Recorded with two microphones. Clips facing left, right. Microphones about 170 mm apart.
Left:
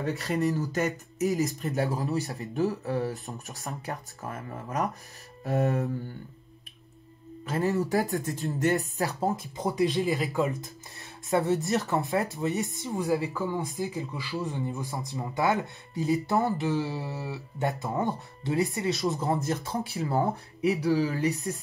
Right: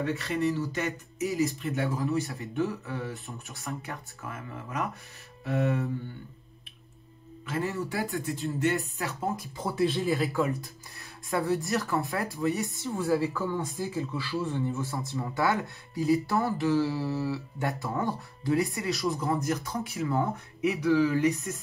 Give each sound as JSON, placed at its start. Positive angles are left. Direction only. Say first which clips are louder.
{"t": 0.0, "sound": "speech", "louder": "left 1 dB", "side_deg": 40}
{"t": 7.4, "sound": "speech", "louder": "left 4 dB", "side_deg": 40}
{"t": 9.6, "sound": "speech", "louder": "left 1 dB", "side_deg": 15}